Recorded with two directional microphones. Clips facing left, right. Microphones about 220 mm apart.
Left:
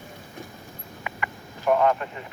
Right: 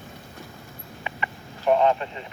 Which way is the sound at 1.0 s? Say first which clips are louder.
Even; 25° right (ahead or behind).